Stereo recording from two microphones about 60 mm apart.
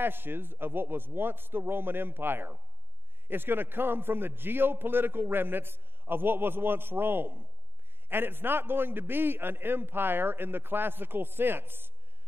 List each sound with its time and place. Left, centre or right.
0.0 s a man's voice: right